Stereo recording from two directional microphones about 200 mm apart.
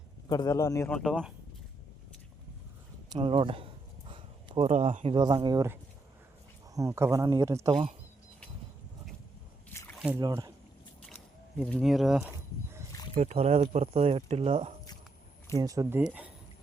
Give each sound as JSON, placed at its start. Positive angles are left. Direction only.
{"t": 0.3, "sound": "a man's voice", "side_deg": 20}
{"t": 0.9, "sound": "speech", "side_deg": 5}
{"t": 3.1, "sound": "speech", "side_deg": -25}
{"t": 4.1, "sound": "a sound", "side_deg": -25}
{"t": 5.1, "sound": "speech", "side_deg": -20}
{"t": 9.7, "sound": "a sound", "side_deg": 10}
{"t": 10.2, "sound": "speech", "side_deg": -20}
{"t": 11.5, "sound": "speech", "side_deg": 0}
{"t": 13.1, "sound": "speech", "side_deg": -30}
{"t": 15.5, "sound": "speech", "side_deg": -20}